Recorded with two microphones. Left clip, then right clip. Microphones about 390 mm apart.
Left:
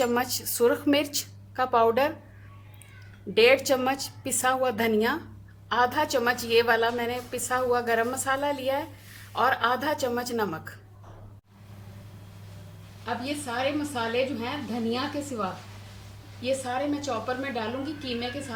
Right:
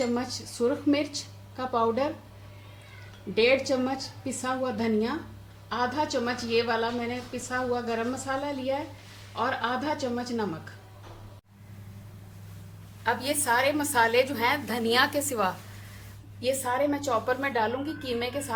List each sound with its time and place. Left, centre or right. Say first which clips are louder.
0.0 s a woman's voice: left 4 dB; left
3.3 s a woman's voice: left 3 dB; left
13.2 s a woman's voice: right 4 dB; right